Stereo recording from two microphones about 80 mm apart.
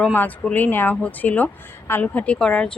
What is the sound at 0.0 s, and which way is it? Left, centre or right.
A woman's voice, left.